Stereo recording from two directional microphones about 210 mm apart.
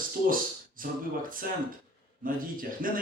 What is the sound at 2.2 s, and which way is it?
Speech, 40° right (ahead or behind).